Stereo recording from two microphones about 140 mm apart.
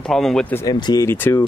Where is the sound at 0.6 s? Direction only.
30° left (ahead or behind).